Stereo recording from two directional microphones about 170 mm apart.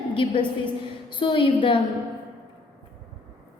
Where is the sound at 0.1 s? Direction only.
30° left (ahead or behind).